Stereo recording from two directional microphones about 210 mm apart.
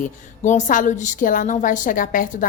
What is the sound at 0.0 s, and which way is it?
A woman's voice, 35° left (ahead or behind).